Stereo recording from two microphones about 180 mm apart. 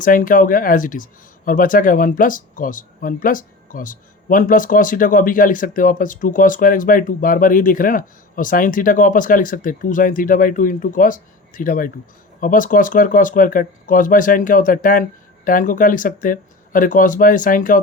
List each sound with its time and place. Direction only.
0.0 s speech: 50° left (ahead or behind)